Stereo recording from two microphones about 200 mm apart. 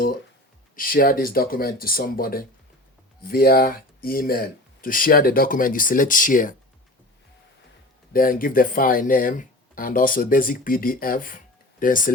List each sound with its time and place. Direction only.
0.8 s speech: 45° left (ahead or behind)
8.1 s speech: 45° left (ahead or behind)